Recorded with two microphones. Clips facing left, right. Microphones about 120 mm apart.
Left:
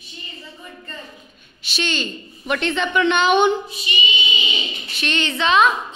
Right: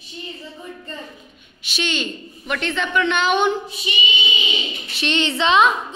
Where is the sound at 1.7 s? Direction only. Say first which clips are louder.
Even; 10° right (ahead or behind).